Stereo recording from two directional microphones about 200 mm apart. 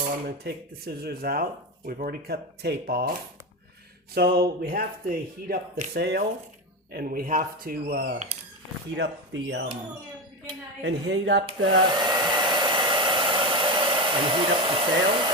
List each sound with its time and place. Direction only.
0.3 s speech: 50° right (ahead or behind)
5.9 s speech: 55° right (ahead or behind)
9.0 s speech: 65° right (ahead or behind)
10.8 s speech: 65° right (ahead or behind)
11.9 s hair dryer: 20° right (ahead or behind)